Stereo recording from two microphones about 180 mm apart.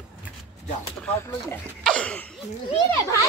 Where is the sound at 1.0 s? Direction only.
10° left (ahead or behind).